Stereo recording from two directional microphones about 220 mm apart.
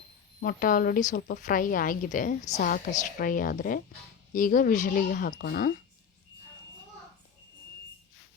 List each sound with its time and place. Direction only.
0.4 s speech: 40° left (ahead or behind)